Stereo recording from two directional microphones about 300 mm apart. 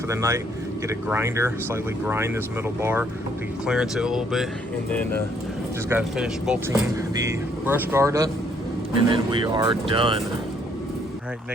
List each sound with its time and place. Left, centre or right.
0.1 s speech: centre
5.9 s speech: centre